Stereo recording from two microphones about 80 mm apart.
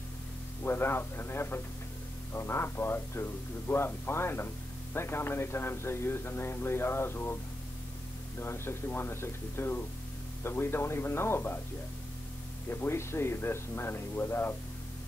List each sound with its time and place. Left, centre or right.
0.7 s speech: left
8.4 s speech: left
12.6 s speech: left